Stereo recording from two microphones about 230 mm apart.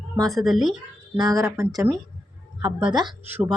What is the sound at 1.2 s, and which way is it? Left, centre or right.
Speech, centre.